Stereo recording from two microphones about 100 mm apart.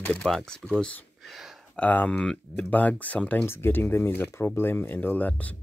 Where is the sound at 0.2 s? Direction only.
5° left (ahead or behind).